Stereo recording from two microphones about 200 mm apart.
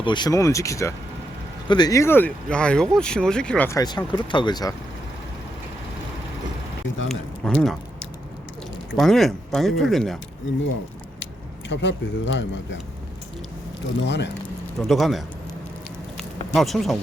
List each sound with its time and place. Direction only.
0.0 s speech: 20° left (ahead or behind)
7.1 s speech: centre (ahead or behind)
9.0 s speech: centre (ahead or behind)
11.7 s speech: 65° left (ahead or behind)
14.0 s speech: 60° left (ahead or behind)
14.8 s speech: centre (ahead or behind)
16.1 s a sound: centre (ahead or behind)